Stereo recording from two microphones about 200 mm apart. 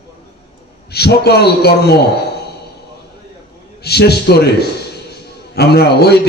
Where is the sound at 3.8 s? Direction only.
55° left (ahead or behind).